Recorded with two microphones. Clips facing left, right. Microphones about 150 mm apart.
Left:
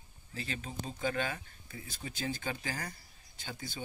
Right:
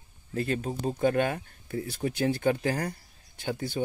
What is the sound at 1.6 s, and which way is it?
Speech, 65° right (ahead or behind).